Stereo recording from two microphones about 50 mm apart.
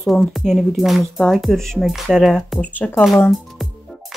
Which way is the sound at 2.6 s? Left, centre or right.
Left.